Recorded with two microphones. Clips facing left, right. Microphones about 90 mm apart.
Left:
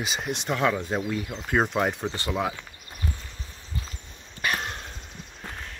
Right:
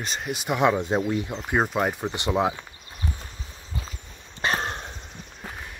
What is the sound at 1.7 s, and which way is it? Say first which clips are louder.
Speech: right 1 dB; 5° right (ahead or behind).